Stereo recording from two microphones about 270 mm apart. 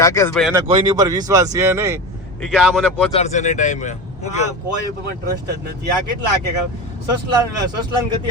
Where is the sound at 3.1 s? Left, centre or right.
Left.